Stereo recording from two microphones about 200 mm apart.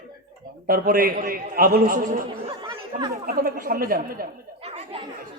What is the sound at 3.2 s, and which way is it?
A man's voice, 45° right (ahead or behind).